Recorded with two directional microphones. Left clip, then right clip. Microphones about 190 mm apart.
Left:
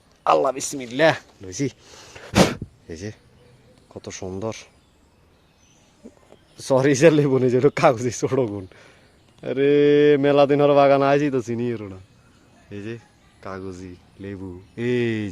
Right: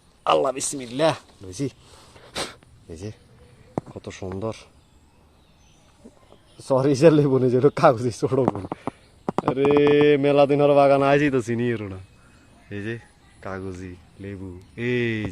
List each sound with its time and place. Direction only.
0.3 s speech: centre (ahead or behind); by 1.7 s 20° left (ahead or behind)
1.9 s a sound: 35° left (ahead or behind)
2.1 s a sound: 60° left (ahead or behind)
2.9 s speech: 20° left (ahead or behind)
3.9 s speech: 5° left (ahead or behind)
6.6 s speech: 25° left (ahead or behind)
9.6 s speech: 10° left (ahead or behind)
14.2 s speech: 20° left (ahead or behind)